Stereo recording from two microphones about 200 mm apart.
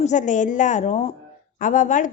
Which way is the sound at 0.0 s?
35° left (ahead or behind).